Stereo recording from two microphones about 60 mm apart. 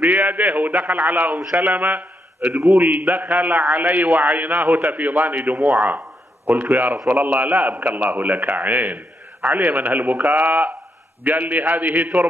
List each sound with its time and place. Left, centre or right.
0.3 s a man's voice: right
2.5 s a man's voice: centre
2.8 s a man's voice: right